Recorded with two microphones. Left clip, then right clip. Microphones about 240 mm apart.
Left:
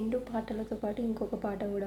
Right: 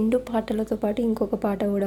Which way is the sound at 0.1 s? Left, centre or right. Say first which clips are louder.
Right 10 dB; right.